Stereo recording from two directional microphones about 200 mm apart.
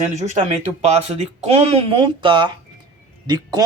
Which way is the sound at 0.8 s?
35° right (ahead or behind).